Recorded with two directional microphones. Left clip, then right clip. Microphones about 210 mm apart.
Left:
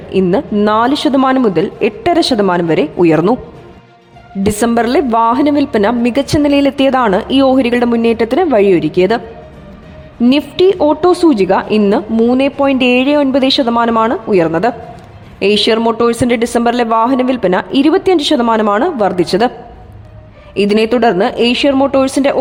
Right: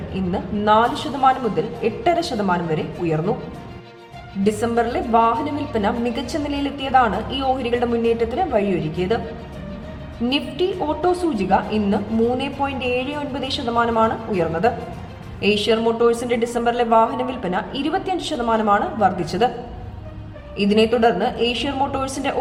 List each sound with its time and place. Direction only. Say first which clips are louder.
0.1 s a woman's voice: left 14 dB; 50° left (ahead or behind)
4.4 s a woman's voice: left 7 dB; 50° left (ahead or behind)
10.2 s a woman's voice: left 11 dB; 50° left (ahead or behind)
20.6 s a woman's voice: left 6 dB; 50° left (ahead or behind)